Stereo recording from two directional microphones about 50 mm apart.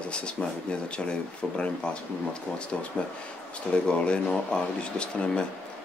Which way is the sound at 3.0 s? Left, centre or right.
Centre.